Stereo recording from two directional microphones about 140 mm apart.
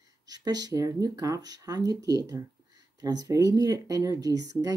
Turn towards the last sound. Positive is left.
turn(degrees=-25)  # may be behind; listen again after turning